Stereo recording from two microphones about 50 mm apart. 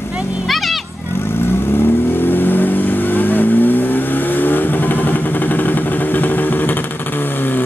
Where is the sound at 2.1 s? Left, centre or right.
Left.